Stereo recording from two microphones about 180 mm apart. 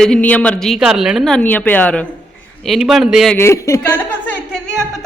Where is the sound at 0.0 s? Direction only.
5° left (ahead or behind).